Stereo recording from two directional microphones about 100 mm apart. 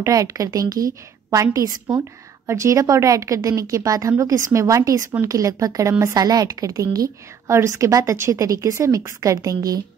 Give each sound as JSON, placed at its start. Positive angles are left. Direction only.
{"t": 0.0, "sound": "a woman's voice", "side_deg": -35}